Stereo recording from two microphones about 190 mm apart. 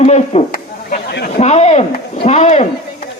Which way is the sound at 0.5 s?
55° left (ahead or behind).